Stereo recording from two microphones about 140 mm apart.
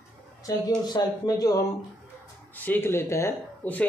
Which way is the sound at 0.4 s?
30° left (ahead or behind).